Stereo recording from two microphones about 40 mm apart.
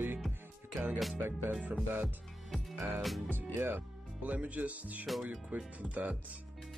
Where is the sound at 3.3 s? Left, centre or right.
Right.